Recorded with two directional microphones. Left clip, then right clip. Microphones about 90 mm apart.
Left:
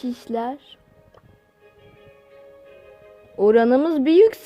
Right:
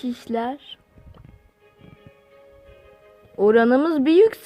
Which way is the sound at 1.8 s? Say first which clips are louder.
Left 1 dB; 40° left (ahead or behind).